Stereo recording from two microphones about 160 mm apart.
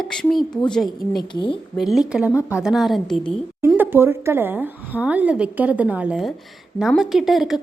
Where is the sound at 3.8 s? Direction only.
15° right (ahead or behind).